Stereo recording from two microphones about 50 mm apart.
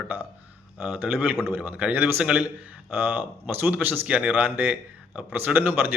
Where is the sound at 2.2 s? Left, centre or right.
Right.